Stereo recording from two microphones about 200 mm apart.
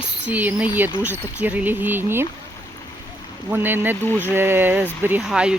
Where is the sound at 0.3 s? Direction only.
10° right (ahead or behind).